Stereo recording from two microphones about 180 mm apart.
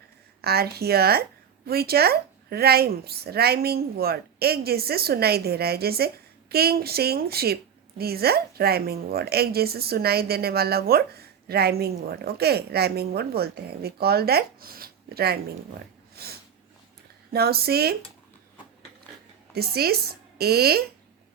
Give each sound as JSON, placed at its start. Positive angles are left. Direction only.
{"t": 0.4, "sound": "a woman's voice", "side_deg": -60}
{"t": 17.3, "sound": "a woman's voice", "side_deg": -60}
{"t": 19.5, "sound": "a woman's voice", "side_deg": -60}